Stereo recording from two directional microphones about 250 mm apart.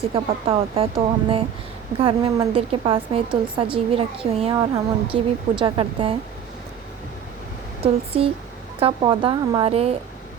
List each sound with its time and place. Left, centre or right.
0.1 s a woman's voice: right
7.8 s a woman's voice: right